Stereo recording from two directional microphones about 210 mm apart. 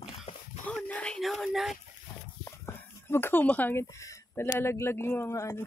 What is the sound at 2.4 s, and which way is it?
Speech, 10° left (ahead or behind).